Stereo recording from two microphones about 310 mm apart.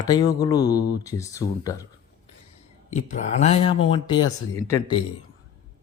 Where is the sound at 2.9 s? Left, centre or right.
Left.